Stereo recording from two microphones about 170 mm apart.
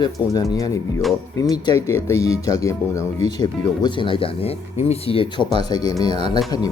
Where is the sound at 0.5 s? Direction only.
20° left (ahead or behind).